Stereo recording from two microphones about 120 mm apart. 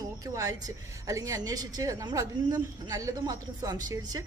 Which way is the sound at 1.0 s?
25° right (ahead or behind).